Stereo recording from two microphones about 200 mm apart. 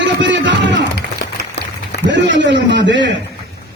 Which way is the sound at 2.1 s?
65° right (ahead or behind).